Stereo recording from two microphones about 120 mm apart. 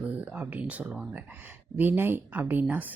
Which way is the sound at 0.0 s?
15° right (ahead or behind).